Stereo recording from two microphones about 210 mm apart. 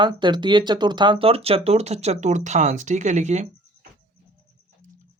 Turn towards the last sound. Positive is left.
turn(degrees=-35)  # may be behind; listen again after turning